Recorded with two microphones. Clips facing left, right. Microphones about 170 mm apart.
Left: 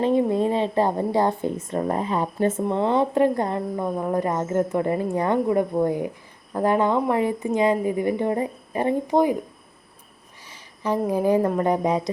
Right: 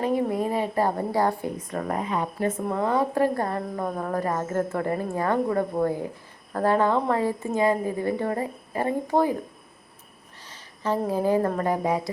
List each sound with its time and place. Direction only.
0.0 s a woman's voice: 25° left (ahead or behind)
10.5 s speech: 15° left (ahead or behind)